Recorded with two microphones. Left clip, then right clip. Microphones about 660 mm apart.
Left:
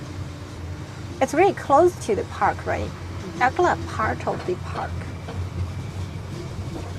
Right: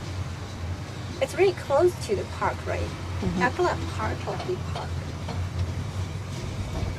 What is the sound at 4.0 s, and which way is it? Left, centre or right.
Speech, left.